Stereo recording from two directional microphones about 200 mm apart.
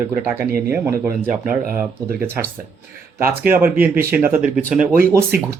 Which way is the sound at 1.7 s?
10° right (ahead or behind).